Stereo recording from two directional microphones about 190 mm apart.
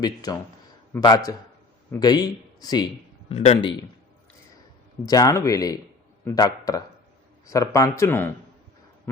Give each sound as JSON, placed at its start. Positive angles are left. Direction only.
{"t": 0.0, "sound": "a man's voice", "side_deg": 20}
{"t": 3.3, "sound": "speech", "side_deg": 35}
{"t": 5.0, "sound": "speech", "side_deg": 20}